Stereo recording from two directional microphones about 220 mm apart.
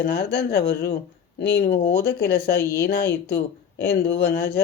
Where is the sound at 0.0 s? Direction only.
45° left (ahead or behind).